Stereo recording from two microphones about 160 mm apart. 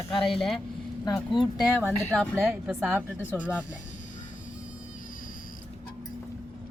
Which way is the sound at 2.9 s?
10° right (ahead or behind).